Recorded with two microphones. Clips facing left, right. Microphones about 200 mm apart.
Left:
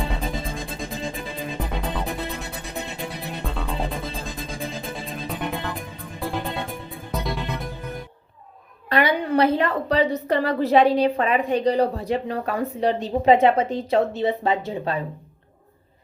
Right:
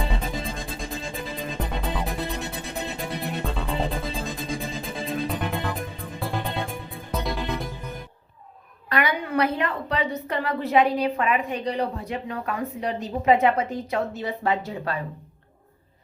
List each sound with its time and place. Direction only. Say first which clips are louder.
0.4 s music: left 2 dB; centre (ahead or behind)
8.9 s a woman's voice: left 4 dB; 30° left (ahead or behind)